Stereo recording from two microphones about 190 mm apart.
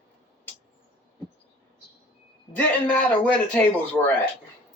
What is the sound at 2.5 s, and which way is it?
A man's voice, 5° left (ahead or behind).